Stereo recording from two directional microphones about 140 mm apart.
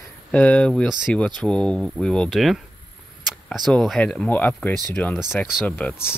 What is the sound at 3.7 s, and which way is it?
Speech, centre (ahead or behind).